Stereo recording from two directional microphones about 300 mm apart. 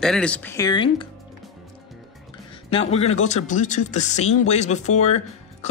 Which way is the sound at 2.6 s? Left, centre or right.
Left.